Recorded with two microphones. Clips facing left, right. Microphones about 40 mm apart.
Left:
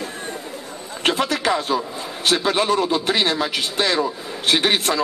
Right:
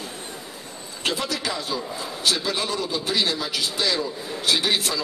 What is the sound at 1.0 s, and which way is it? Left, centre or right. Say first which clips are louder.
A man's voice: left 7 dB; left.